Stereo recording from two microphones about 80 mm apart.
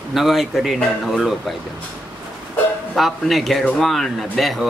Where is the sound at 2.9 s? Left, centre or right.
Centre.